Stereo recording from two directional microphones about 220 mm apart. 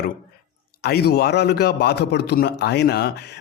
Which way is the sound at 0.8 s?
45° left (ahead or behind).